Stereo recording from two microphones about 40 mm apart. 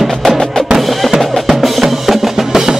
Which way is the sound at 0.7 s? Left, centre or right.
Centre.